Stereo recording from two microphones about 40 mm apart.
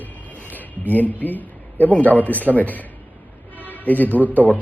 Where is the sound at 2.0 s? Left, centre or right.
Left.